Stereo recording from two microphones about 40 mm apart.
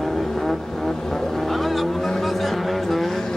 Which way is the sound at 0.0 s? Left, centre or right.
Centre.